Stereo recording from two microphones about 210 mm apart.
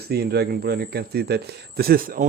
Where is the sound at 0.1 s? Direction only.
50° right (ahead or behind).